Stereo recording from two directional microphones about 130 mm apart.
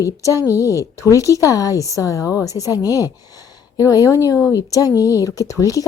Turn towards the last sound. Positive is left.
turn(degrees=25)  # may be behind; listen again after turning